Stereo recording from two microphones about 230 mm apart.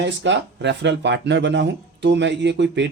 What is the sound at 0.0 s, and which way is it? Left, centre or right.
Speech, right.